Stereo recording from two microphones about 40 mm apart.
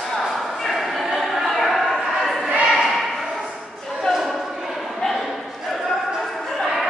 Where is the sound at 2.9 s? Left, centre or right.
Centre.